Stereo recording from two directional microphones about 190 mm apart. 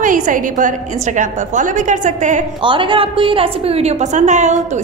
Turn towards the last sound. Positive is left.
turn(degrees=-40)  # may be behind; listen again after turning